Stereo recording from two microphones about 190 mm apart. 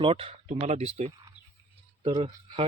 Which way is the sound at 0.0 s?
30° right (ahead or behind).